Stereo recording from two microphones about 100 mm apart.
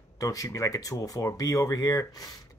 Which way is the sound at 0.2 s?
35° left (ahead or behind).